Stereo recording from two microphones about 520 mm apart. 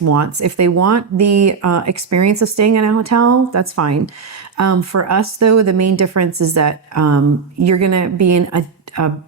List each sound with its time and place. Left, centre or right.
0.0 s speech: right